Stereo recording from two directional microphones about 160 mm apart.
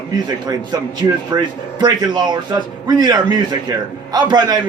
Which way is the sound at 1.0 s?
25° right (ahead or behind).